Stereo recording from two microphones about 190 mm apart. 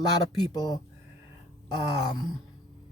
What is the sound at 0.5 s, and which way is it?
Speech, 20° left (ahead or behind).